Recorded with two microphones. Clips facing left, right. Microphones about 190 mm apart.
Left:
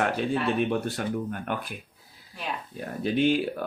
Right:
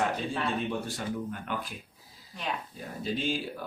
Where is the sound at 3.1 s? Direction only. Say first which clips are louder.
Left 11 dB; 65° left (ahead or behind).